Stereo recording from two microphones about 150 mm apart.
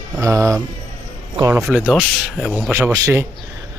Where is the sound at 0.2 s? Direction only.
20° right (ahead or behind).